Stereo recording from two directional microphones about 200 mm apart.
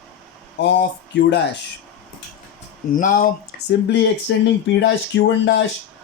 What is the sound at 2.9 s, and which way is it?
Speech, 45° left (ahead or behind).